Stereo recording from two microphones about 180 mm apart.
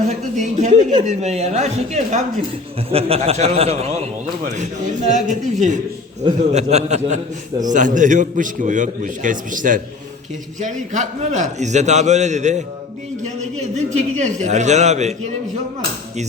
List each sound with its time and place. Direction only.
0.1 s a man's voice: 40° right (ahead or behind)
13.7 s a man's voice: 40° right (ahead or behind)